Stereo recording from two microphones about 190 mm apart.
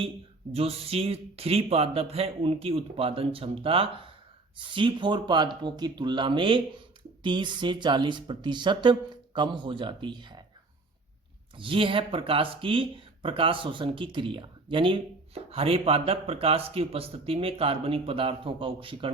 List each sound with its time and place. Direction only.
0.5 s speech: 30° right (ahead or behind)
11.5 s speech: 25° right (ahead or behind)